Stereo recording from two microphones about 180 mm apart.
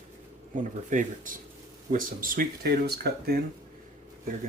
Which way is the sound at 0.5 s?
45° right (ahead or behind).